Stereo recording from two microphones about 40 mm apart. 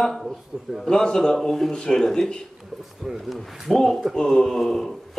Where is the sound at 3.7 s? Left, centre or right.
Centre.